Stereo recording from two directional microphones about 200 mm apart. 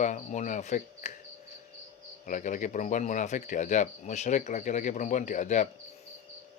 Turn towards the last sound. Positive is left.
turn(degrees=40)  # may be behind; listen again after turning